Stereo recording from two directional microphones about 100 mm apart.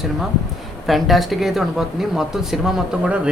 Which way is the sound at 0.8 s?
Centre (ahead or behind).